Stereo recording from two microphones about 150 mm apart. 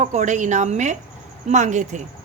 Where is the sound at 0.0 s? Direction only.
55° right (ahead or behind).